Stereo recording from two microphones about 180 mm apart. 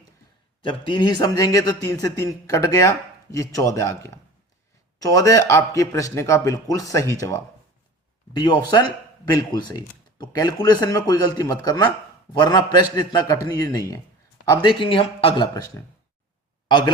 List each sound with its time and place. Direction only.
0.6 s a man's voice: 25° left (ahead or behind)